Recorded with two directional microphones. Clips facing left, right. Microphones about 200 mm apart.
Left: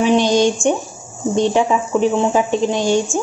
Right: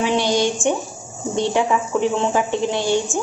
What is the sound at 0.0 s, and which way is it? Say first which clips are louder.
Speech: left 5 dB; 20° left (ahead or behind).